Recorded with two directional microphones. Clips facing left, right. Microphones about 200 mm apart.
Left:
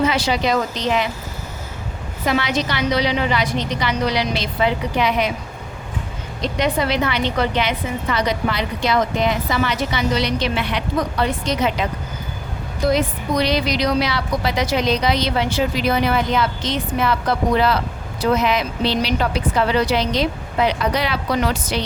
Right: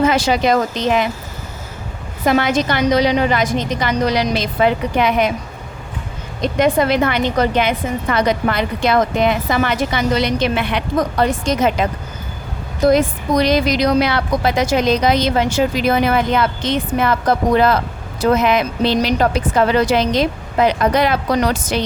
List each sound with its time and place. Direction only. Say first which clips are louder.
0.0 s a woman's voice: right 4 dB; 45° right (ahead or behind)
2.2 s a woman's voice: right 5 dB; 50° right (ahead or behind)
6.4 s a woman's voice: right 5 dB; 50° right (ahead or behind)